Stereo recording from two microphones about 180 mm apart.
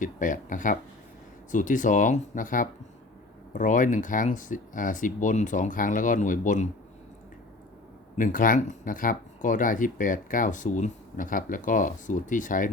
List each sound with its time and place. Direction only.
0.0 s speech: 45° left (ahead or behind)
8.2 s speech: 50° left (ahead or behind)